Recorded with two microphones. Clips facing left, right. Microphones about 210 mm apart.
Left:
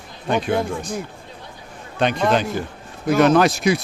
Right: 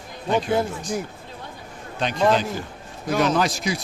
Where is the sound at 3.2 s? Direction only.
60° left (ahead or behind).